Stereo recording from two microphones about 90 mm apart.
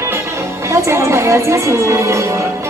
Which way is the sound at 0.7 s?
30° right (ahead or behind).